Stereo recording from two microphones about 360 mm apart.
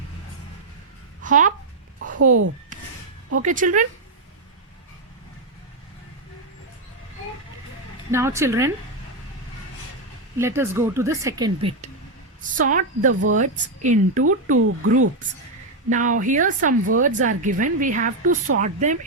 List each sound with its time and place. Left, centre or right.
1.2 s speech: right
2.0 s a sound: right
3.4 s speech: right
8.1 s a woman's voice: centre
10.3 s a woman's voice: centre
14.5 s speech: right
15.9 s speech: right